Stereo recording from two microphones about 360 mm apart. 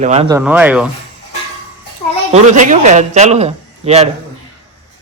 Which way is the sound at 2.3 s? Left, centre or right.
Centre.